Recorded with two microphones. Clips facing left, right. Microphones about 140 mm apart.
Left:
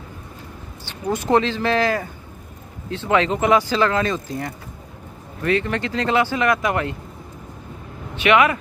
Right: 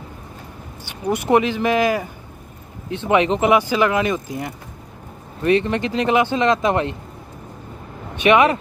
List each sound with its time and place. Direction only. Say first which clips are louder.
0.8 s speech: right 2 dB; 15° right (ahead or behind)
8.2 s speech: right 2 dB; 25° right (ahead or behind)